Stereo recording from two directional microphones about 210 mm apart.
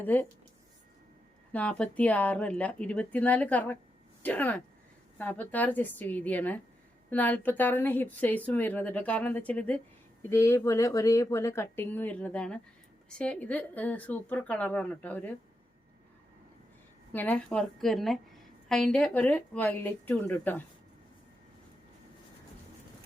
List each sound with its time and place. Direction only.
0.0 s a woman's voice: 10° left (ahead or behind)
1.5 s a woman's voice: 5° left (ahead or behind)
17.1 s a woman's voice: 10° left (ahead or behind)